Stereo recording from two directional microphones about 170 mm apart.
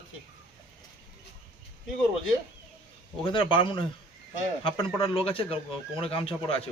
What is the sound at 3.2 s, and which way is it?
A man's voice, 30° left (ahead or behind).